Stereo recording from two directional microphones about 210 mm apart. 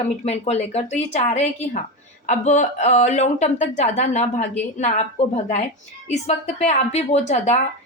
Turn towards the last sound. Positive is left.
turn(degrees=30)  # may be behind; listen again after turning